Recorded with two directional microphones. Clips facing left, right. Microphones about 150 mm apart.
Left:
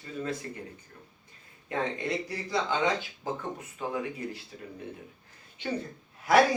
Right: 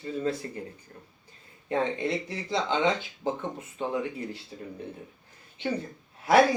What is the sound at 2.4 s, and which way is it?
Speech, 25° right (ahead or behind).